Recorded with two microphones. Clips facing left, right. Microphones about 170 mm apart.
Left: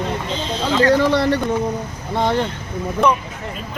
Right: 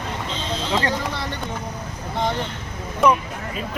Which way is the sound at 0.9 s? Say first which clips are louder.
Left 12 dB; 90° left.